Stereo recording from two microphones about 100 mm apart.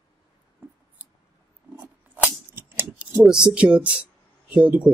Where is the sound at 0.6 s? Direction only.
20° right (ahead or behind).